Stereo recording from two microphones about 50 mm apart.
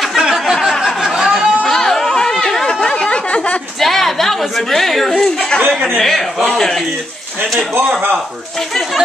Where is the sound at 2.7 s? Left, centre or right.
Centre.